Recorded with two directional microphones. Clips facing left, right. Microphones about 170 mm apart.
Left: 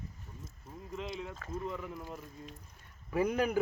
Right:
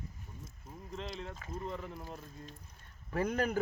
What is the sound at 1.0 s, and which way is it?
Speech, 5° left (ahead or behind).